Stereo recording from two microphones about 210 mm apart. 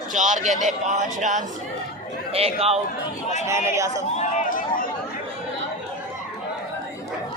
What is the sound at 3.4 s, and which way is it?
Speech, 15° right (ahead or behind).